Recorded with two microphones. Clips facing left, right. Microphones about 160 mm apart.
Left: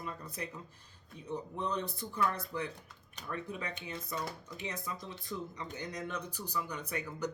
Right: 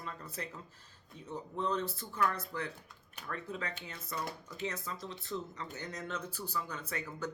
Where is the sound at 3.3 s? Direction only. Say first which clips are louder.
Left 1 dB; 15° left (ahead or behind).